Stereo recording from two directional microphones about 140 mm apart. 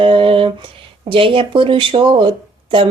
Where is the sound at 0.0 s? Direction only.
40° right (ahead or behind).